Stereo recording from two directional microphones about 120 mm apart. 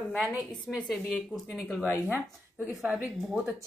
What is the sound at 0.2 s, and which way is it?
A woman's voice, 5° right (ahead or behind).